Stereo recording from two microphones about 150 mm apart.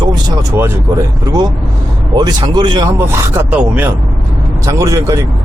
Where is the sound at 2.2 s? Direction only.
30° right (ahead or behind).